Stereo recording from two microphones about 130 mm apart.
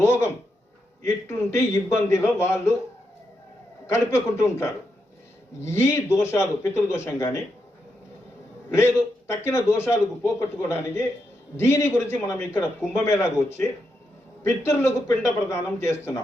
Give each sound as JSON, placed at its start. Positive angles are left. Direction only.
{"t": 0.0, "sound": "a man's voice", "side_deg": 20}
{"t": 3.8, "sound": "a man's voice", "side_deg": 20}
{"t": 8.7, "sound": "a man's voice", "side_deg": 20}